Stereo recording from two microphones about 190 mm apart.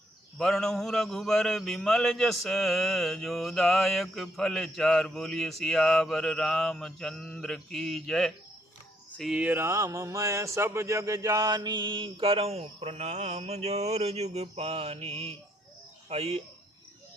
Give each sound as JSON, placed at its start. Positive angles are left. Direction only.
{"t": 0.3, "sound": "a man's voice", "side_deg": 0}